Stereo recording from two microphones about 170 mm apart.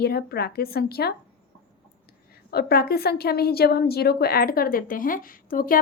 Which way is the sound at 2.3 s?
65° left (ahead or behind).